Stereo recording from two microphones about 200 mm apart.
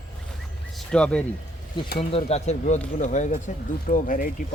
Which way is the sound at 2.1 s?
35° left (ahead or behind).